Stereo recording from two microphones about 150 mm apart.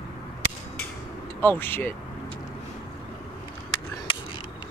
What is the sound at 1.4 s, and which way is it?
Speech, 15° left (ahead or behind).